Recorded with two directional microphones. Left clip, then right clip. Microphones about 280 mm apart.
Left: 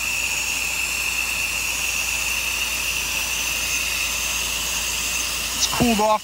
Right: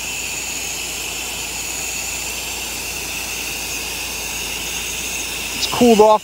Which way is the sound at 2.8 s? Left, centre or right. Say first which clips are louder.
Left 2 dB; right.